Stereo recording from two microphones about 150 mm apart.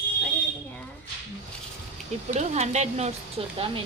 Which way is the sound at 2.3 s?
50° right (ahead or behind).